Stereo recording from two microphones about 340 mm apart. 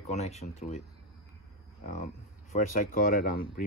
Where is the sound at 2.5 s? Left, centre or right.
Left.